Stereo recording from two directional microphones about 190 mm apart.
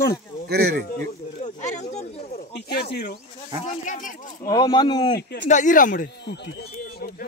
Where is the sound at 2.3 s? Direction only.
60° left (ahead or behind).